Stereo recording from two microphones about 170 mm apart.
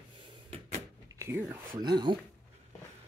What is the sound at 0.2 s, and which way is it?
Cupboard open or close, 30° right (ahead or behind).